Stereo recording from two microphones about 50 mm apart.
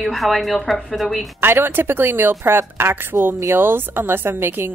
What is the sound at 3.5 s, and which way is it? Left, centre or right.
A woman's voice, right.